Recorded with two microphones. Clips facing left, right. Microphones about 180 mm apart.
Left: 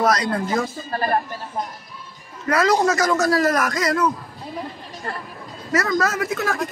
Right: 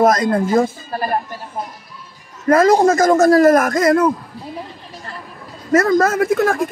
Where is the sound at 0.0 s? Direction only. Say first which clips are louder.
Right 6 dB; 50° right (ahead or behind).